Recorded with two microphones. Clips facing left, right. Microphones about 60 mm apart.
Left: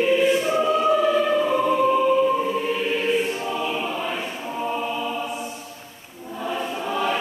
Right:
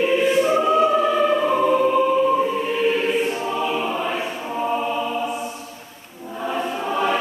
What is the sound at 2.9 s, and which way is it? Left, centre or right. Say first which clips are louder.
Choir: right 2 dB; right.